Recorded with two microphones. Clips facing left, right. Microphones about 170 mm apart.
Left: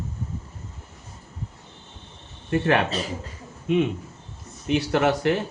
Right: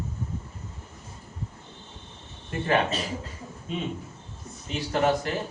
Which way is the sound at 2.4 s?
75° left (ahead or behind).